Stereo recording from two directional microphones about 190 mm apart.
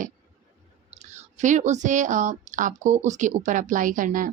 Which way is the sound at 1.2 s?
40° right (ahead or behind).